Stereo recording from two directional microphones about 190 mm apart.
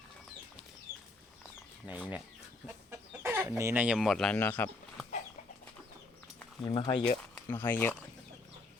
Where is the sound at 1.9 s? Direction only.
10° right (ahead or behind).